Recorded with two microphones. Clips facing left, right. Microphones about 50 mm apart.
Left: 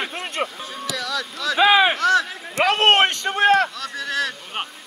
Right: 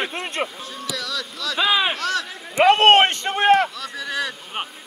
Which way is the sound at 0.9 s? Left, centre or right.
Left.